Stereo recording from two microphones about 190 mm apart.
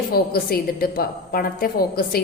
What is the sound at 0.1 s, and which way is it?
A woman's voice, 55° left (ahead or behind).